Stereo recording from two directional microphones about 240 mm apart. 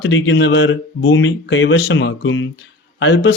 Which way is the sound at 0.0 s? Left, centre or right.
Left.